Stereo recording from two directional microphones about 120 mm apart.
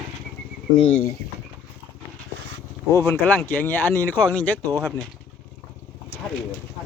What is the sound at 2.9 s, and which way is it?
Speech, 20° left (ahead or behind).